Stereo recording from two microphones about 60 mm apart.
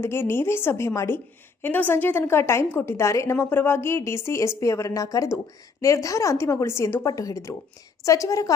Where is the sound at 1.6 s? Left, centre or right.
Left.